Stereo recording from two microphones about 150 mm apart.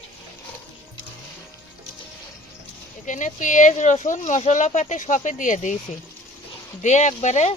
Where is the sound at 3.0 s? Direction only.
55° left (ahead or behind).